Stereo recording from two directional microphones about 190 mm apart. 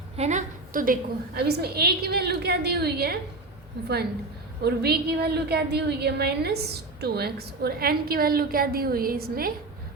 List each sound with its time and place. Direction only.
0.2 s a woman's voice: 40° right (ahead or behind)
1.4 s a woman's voice: 55° right (ahead or behind)
4.6 s a woman's voice: 60° right (ahead or behind)